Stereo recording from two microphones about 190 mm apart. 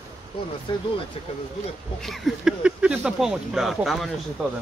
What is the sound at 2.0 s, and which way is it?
Speech, centre (ahead or behind).